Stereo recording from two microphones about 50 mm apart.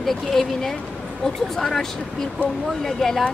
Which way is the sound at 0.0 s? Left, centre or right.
Centre.